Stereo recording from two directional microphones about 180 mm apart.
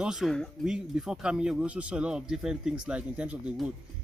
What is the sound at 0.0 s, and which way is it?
Speech, 5° right (ahead or behind).